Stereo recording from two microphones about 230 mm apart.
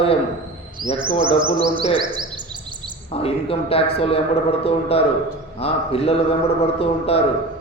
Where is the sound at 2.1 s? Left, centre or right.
Centre.